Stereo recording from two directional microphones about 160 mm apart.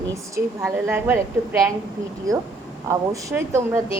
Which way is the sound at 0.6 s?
15° right (ahead or behind).